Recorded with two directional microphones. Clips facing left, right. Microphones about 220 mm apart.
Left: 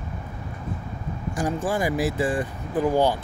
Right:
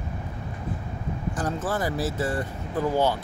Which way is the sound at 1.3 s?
15° left (ahead or behind).